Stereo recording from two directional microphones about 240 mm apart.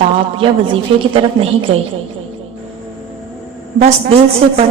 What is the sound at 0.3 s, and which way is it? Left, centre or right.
A woman's voice, right.